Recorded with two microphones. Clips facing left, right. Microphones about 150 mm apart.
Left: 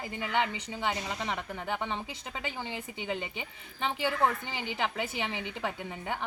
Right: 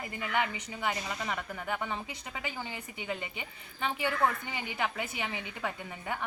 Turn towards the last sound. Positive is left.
turn(degrees=25)  # may be behind; listen again after turning